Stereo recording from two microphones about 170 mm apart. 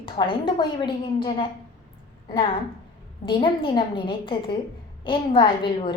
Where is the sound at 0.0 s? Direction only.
30° left (ahead or behind).